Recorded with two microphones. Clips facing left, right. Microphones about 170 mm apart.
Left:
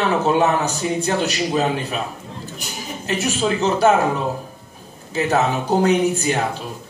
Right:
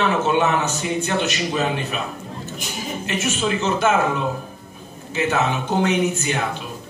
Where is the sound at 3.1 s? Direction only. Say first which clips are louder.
Left 3 dB; 35° left (ahead or behind).